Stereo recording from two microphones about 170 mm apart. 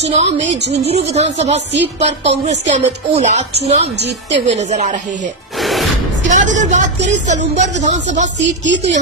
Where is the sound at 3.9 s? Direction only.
80° right.